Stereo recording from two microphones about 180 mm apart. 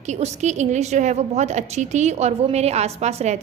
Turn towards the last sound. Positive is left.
turn(degrees=-40)  # may be behind; listen again after turning